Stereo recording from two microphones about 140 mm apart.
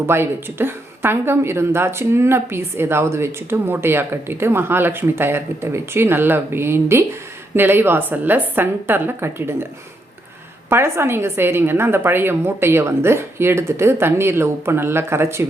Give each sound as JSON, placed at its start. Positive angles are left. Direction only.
{"t": 0.0, "sound": "a woman's voice", "side_deg": -15}
{"t": 10.7, "sound": "a woman's voice", "side_deg": -15}